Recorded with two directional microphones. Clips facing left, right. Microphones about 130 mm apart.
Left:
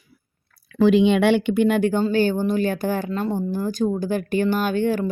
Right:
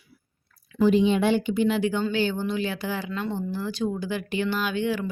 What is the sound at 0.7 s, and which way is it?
Speech, 75° left (ahead or behind).